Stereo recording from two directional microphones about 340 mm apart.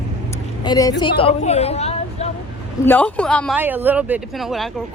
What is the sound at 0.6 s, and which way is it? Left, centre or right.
Speech, centre.